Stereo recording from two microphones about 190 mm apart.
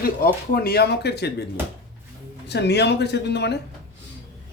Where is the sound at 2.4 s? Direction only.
65° left (ahead or behind).